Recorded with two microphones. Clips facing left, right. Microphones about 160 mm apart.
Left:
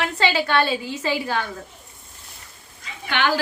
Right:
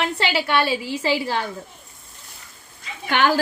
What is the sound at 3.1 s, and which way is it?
Speech, 45° right (ahead or behind).